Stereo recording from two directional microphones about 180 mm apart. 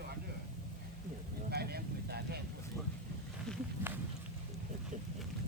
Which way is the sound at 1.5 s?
60° right (ahead or behind).